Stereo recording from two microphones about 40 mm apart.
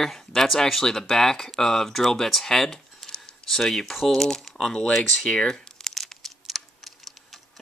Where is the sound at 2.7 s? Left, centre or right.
Left.